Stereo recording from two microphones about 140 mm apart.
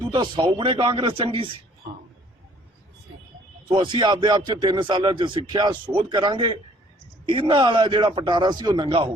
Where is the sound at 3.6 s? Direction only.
35° right (ahead or behind).